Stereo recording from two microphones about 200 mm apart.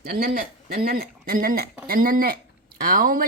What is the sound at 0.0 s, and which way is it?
Speech, 50° right (ahead or behind).